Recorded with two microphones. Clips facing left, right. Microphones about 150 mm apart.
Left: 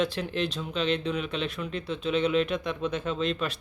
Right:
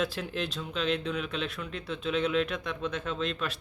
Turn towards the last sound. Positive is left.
turn(degrees=0)  # may be behind; listen again after turning